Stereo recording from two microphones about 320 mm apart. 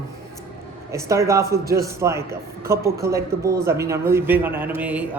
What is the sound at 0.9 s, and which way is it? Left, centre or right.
A woman's voice, centre.